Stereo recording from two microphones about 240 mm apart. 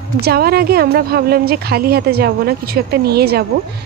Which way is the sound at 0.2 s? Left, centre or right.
Right.